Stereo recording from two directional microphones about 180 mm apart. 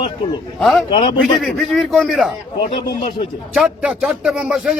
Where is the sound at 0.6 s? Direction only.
Centre (ahead or behind).